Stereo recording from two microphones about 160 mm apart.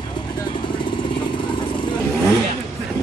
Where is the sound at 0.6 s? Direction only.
30° left (ahead or behind).